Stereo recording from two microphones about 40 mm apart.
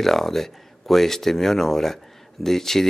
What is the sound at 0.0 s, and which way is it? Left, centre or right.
Speech, centre.